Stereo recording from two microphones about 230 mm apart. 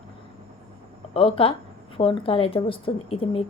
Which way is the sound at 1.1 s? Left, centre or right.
Left.